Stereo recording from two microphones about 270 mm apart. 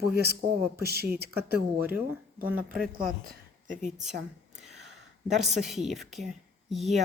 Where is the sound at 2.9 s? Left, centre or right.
Right.